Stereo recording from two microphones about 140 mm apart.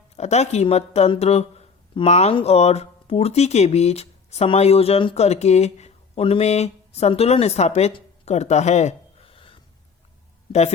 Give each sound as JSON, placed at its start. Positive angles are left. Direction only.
{"t": 0.2, "sound": "speech", "side_deg": 50}